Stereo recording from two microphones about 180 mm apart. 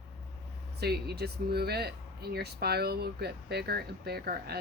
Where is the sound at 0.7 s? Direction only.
65° right (ahead or behind).